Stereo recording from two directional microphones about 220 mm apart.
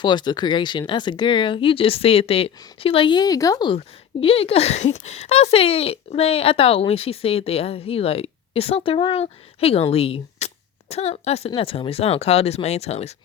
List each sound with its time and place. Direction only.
0.0 s speech: 20° left (ahead or behind)